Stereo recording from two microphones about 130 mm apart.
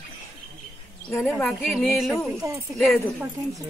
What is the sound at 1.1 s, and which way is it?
Speech, 5° right (ahead or behind).